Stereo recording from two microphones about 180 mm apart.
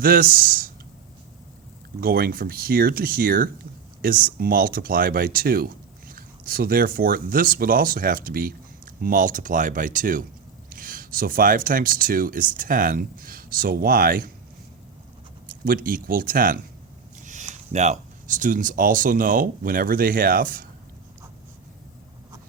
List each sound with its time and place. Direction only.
0.0 s speech: 50° right (ahead or behind)
2.0 s speech: 55° right (ahead or behind)
15.6 s speech: 50° right (ahead or behind)